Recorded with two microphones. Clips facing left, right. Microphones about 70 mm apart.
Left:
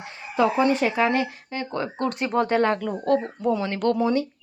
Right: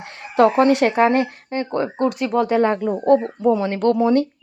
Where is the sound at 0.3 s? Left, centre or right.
Right.